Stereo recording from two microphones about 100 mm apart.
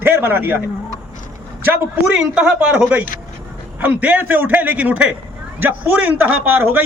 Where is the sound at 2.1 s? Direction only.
10° right (ahead or behind).